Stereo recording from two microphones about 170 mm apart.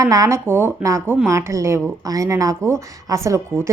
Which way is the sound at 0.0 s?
20° right (ahead or behind).